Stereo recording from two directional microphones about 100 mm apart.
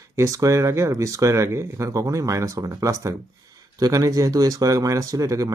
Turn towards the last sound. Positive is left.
turn(degrees=-35)  # may be behind; listen again after turning